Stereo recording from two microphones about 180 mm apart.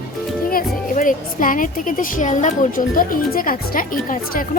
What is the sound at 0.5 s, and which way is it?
Speech, 50° left (ahead or behind).